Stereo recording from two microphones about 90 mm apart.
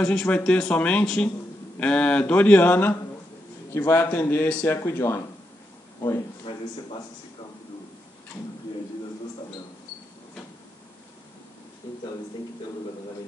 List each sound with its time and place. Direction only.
0.0 s a man's voice: 10° left (ahead or behind); by 5.2 s 30° left (ahead or behind)
6.5 s speech: 85° left